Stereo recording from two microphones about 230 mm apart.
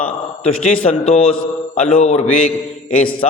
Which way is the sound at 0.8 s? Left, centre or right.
Left.